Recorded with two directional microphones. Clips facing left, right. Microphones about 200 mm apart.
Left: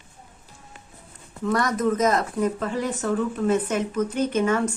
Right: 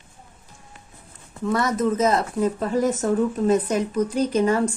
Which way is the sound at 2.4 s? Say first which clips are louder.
Right 4 dB; 40° right (ahead or behind).